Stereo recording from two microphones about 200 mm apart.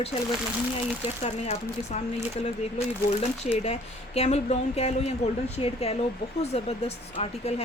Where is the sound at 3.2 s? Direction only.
30° left (ahead or behind).